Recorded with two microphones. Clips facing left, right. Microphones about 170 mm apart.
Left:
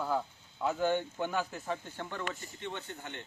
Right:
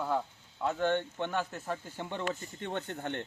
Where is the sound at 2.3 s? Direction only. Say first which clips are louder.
Right 4 dB; 50° right (ahead or behind).